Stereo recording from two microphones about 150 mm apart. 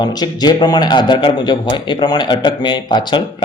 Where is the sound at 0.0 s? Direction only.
25° left (ahead or behind).